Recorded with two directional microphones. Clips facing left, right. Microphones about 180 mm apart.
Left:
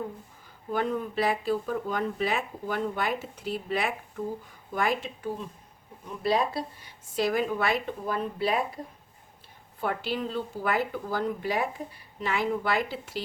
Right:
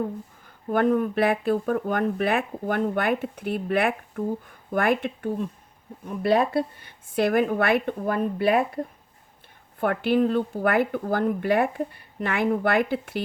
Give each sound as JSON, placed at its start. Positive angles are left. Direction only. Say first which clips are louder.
{"t": 0.0, "sound": "speech", "louder": "right 7 dB", "side_deg": -55}
{"t": 9.8, "sound": "speech", "louder": "right 9 dB", "side_deg": -55}